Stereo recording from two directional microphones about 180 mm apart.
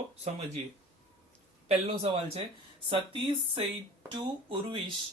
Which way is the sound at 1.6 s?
35° right (ahead or behind).